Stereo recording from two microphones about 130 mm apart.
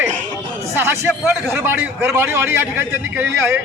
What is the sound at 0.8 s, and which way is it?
A man's voice, 15° right (ahead or behind).